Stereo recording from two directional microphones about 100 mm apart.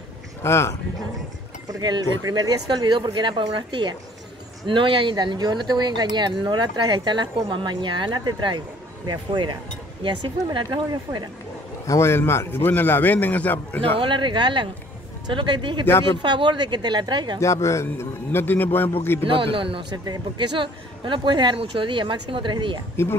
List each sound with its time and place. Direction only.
0.4 s a man's voice: 25° left (ahead or behind)
1.7 s speech: 45° right (ahead or behind)
11.8 s a man's voice: 30° left (ahead or behind)
13.9 s speech: 55° right (ahead or behind)
17.4 s a man's voice: 30° left (ahead or behind)
19.2 s speech: 60° right (ahead or behind)